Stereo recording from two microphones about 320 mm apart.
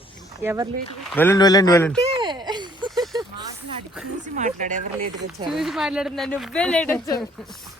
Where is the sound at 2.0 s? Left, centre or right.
Centre.